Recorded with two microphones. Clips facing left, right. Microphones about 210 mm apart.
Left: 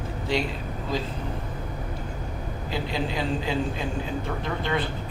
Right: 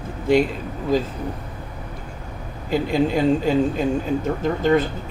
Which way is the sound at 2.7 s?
50° right (ahead or behind).